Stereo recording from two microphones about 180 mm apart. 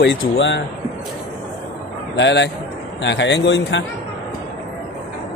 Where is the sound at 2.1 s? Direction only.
80° left.